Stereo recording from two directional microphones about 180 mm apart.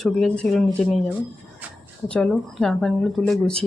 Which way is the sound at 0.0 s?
5° left (ahead or behind).